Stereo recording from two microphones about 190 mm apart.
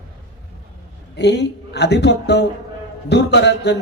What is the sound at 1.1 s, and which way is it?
A man's voice, 65° left (ahead or behind).